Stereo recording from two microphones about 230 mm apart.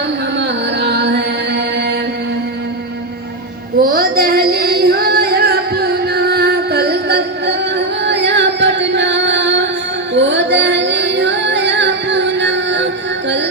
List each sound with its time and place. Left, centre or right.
0.3 s carnatic music: right
3.8 s a sound: right
10.2 s music: right